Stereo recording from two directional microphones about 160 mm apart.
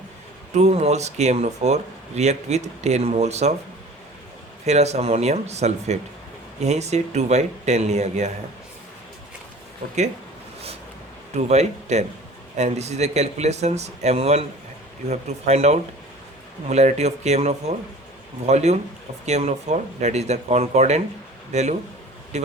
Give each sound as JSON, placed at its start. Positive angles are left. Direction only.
{"t": 0.5, "sound": "speech", "side_deg": -45}
{"t": 4.6, "sound": "speech", "side_deg": -45}
{"t": 11.3, "sound": "speech", "side_deg": -45}